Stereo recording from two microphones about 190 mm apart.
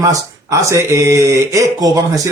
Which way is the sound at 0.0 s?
15° right (ahead or behind).